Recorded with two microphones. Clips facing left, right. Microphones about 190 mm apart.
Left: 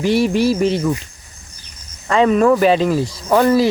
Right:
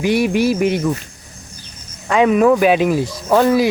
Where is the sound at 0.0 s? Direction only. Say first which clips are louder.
Even; 15° right (ahead or behind).